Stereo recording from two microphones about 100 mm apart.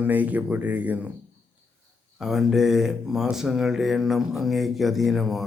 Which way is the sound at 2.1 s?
5° right (ahead or behind).